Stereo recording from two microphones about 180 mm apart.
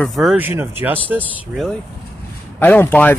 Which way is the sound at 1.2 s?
5° left (ahead or behind).